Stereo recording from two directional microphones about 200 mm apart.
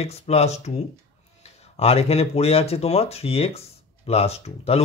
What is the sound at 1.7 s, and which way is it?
Speech, 30° left (ahead or behind).